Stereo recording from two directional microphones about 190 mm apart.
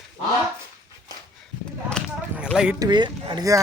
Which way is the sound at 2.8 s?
25° right (ahead or behind).